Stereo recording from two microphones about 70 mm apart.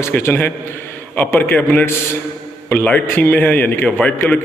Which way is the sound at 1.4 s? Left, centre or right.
Left.